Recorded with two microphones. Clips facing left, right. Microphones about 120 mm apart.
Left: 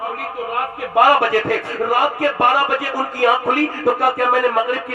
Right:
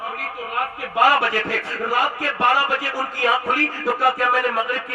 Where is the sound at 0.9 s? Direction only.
55° left (ahead or behind).